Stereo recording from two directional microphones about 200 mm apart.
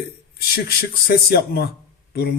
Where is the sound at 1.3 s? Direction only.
50° left (ahead or behind).